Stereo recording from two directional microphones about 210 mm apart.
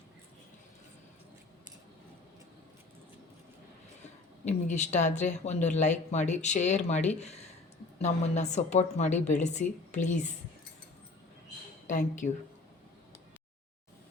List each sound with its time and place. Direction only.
4.0 s speech: 35° left (ahead or behind)
11.9 s speech: 35° left (ahead or behind)